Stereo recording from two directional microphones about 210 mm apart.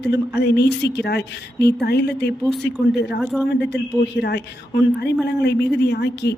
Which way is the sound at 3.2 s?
Centre (ahead or behind).